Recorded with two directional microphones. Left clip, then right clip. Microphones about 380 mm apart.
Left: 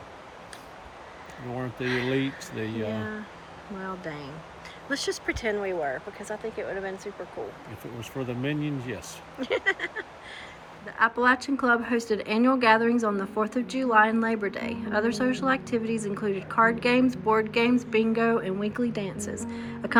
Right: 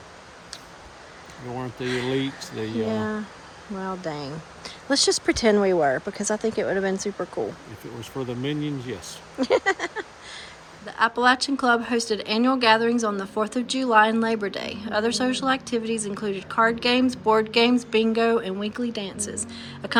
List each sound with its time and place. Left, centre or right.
1.5 s a woman's voice: centre
5.8 s speech: right
8.4 s a woman's voice: centre